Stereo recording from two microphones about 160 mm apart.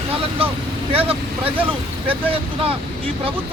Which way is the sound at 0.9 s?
35° right (ahead or behind).